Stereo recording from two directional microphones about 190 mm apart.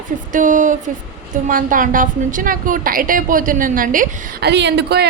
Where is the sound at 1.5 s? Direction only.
45° right (ahead or behind).